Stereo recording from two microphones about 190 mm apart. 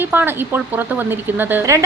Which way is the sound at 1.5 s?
15° right (ahead or behind).